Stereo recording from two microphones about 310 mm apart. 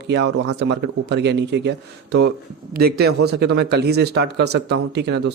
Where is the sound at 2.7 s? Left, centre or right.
Right.